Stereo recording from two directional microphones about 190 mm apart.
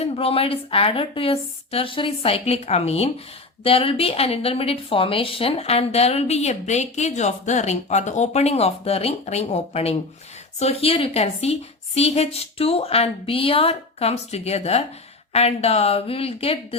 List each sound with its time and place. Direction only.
0.0 s a woman's voice: 30° left (ahead or behind)